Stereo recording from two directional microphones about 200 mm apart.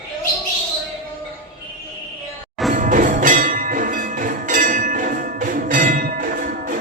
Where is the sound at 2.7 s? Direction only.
40° right (ahead or behind).